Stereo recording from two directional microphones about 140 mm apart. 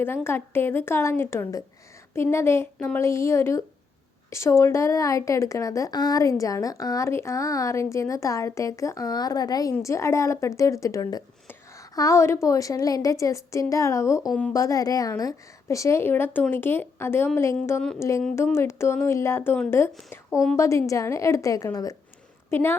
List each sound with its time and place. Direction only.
0.0 s a woman's voice: 15° left (ahead or behind)